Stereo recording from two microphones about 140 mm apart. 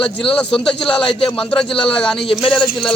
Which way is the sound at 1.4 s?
5° left (ahead or behind).